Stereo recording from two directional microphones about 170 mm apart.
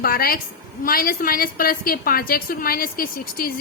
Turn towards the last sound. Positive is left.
turn(degrees=60)  # may be behind; listen again after turning